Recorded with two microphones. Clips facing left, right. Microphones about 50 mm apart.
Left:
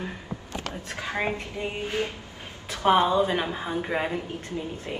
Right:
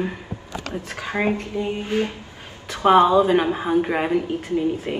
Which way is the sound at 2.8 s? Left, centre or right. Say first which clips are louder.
Right 6 dB; right.